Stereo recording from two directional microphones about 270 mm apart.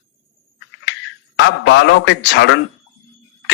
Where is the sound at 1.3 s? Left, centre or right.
Left.